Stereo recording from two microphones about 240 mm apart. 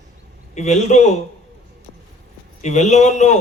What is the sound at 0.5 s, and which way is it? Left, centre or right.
Speech, left.